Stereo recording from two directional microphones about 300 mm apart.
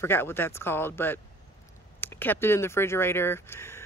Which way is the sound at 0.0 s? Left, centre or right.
Centre.